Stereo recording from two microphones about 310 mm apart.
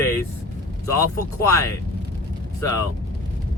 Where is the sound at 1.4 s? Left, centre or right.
Centre.